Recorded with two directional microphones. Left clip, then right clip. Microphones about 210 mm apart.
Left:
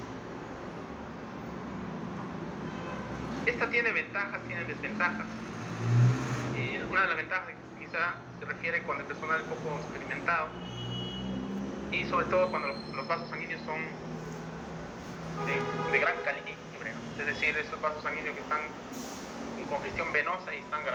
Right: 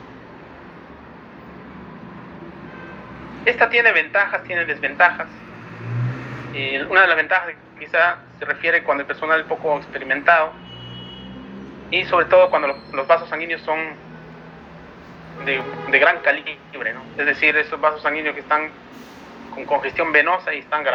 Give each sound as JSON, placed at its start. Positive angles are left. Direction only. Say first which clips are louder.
{"t": 3.4, "sound": "a man's voice", "louder": "right 14 dB", "side_deg": -45}
{"t": 6.6, "sound": "a man's voice", "louder": "right 15 dB", "side_deg": -40}
{"t": 11.9, "sound": "a man's voice", "louder": "right 14 dB", "side_deg": -45}
{"t": 15.4, "sound": "a man's voice", "louder": "right 10 dB", "side_deg": -45}
{"t": 19.7, "sound": "a man's voice", "louder": "right 15 dB", "side_deg": -45}